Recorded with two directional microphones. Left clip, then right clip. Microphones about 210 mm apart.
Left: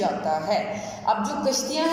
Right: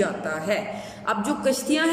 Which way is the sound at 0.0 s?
40° right (ahead or behind).